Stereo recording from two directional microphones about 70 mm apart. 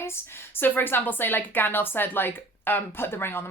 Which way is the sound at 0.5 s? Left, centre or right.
Left.